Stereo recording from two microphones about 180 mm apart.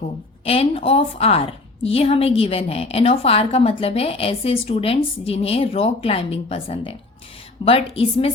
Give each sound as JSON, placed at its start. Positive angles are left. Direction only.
{"t": 0.4, "sound": "a woman's voice", "side_deg": 35}